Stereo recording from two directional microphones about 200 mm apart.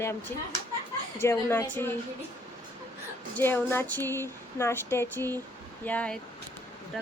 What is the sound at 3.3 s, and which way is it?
Speech, 10° left (ahead or behind).